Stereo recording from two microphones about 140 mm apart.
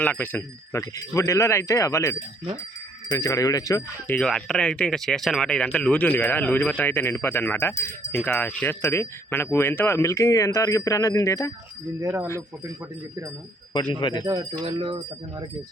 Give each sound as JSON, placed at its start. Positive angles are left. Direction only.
{"t": 0.0, "sound": "speech", "side_deg": 10}
{"t": 4.0, "sound": "speech", "side_deg": 10}
{"t": 12.0, "sound": "speech", "side_deg": -15}
{"t": 14.0, "sound": "speech", "side_deg": 35}
{"t": 14.3, "sound": "speech", "side_deg": -30}